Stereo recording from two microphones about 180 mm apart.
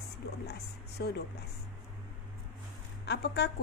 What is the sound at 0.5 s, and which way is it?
Speech, 65° left (ahead or behind).